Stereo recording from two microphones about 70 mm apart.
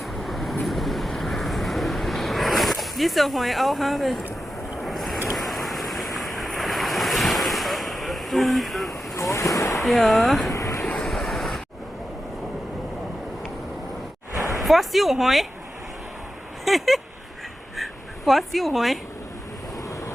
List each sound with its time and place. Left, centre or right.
0.0 s vehicle: centre
5.3 s waves: centre
9.1 s waves: left
9.7 s speech: centre
10.5 s vehicle: left
10.9 s waves: centre
14.5 s speech: centre
16.6 s speech: centre
18.3 s speech: centre